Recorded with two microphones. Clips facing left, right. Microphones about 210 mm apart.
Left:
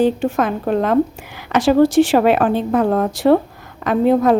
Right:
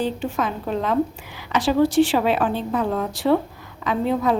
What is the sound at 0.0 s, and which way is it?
A woman's voice, 50° left (ahead or behind).